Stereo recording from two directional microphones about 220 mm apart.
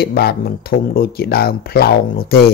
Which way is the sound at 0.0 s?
45° left (ahead or behind).